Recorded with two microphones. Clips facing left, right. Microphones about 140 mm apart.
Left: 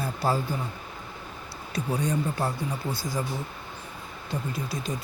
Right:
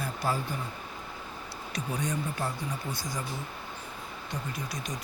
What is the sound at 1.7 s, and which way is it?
Speech, 30° left (ahead or behind).